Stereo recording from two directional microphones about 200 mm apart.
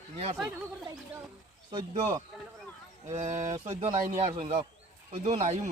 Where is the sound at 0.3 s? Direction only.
Centre (ahead or behind).